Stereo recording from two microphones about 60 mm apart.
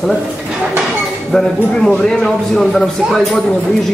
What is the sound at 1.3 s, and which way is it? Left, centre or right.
A man's voice, centre.